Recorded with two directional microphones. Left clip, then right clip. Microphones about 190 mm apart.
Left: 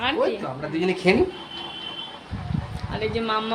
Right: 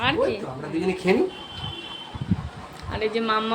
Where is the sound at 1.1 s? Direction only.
40° left (ahead or behind).